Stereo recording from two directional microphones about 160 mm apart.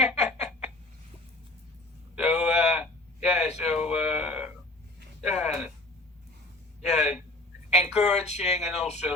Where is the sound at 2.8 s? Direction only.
45° left (ahead or behind).